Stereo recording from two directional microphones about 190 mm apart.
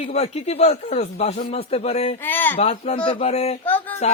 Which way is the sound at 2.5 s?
30° left (ahead or behind).